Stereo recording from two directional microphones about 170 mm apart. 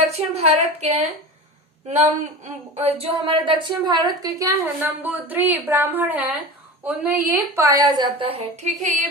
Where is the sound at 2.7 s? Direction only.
35° right (ahead or behind); by 6.2 s 10° right (ahead or behind).